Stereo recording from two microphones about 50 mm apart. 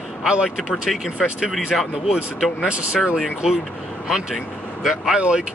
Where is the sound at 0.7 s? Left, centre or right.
Centre.